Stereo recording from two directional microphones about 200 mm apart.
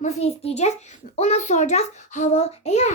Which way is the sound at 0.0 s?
30° left (ahead or behind).